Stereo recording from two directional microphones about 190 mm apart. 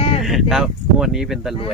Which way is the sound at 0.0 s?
30° left (ahead or behind).